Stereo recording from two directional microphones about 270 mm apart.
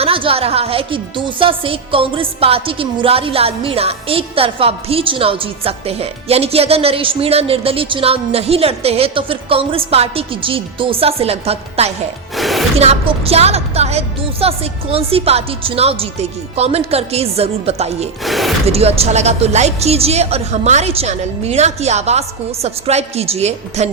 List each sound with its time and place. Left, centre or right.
0.0 s a woman's voice: centre
12.4 s music: centre
12.8 s a woman's voice: right
18.3 s speech: centre
18.7 s a woman's voice: right